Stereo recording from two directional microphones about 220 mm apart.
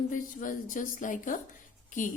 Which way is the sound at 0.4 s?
35° left (ahead or behind).